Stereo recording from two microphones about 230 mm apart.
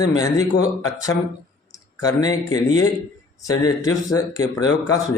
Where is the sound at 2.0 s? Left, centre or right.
Centre.